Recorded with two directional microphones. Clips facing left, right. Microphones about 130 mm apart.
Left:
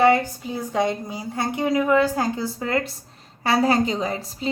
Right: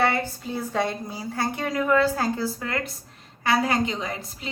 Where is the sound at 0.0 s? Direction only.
15° left (ahead or behind).